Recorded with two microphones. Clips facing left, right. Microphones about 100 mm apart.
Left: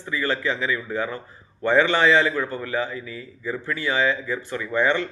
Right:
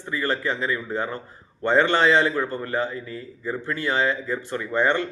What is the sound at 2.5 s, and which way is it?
Speech, 45° right (ahead or behind).